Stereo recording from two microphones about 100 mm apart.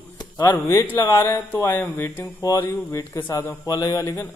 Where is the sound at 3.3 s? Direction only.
40° left (ahead or behind).